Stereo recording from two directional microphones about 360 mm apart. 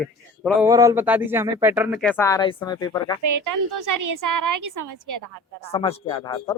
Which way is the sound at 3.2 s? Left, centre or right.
Right.